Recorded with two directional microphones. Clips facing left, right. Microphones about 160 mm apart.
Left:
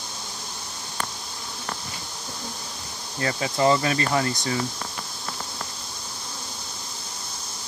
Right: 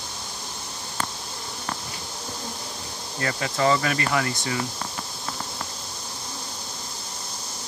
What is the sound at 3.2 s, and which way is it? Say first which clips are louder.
Speech: left 2 dB; 25° left (ahead or behind).